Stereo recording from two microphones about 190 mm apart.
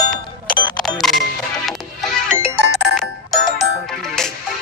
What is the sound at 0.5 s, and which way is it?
Music, 25° left (ahead or behind).